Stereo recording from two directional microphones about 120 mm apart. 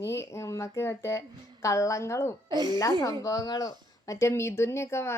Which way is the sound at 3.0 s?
30° left (ahead or behind).